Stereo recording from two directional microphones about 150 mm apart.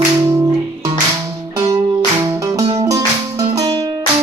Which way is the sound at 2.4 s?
25° right (ahead or behind).